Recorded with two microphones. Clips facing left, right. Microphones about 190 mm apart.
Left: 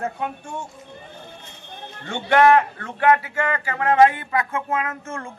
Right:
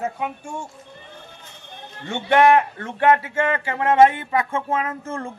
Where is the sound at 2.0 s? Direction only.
20° right (ahead or behind).